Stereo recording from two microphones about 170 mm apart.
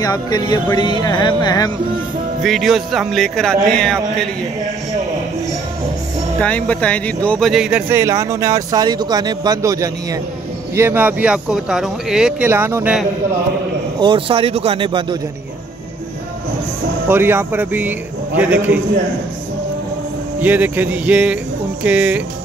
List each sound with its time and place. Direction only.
0.0 s speech: 20° left (ahead or behind)
2.4 s speech: centre (ahead or behind)
6.4 s speech: 5° left (ahead or behind)
7.9 s speech: 15° right (ahead or behind)
12.4 s a man's voice: 15° right (ahead or behind)
13.9 s speech: 30° right (ahead or behind)
17.1 s a man's voice: 10° right (ahead or behind)
20.3 s a man's voice: 10° right (ahead or behind)